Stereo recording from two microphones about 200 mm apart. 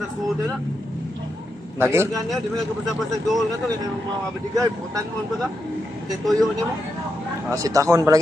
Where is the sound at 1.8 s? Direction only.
10° right (ahead or behind).